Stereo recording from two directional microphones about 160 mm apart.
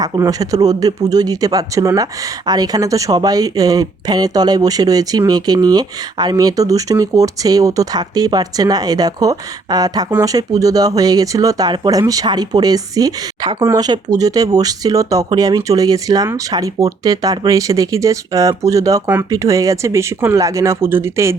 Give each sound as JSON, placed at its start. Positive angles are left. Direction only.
{"t": 0.0, "sound": "speech", "side_deg": -20}